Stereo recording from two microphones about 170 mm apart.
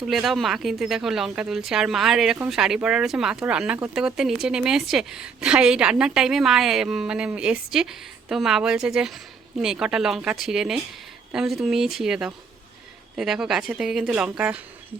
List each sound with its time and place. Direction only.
0.0 s a woman's voice: centre (ahead or behind)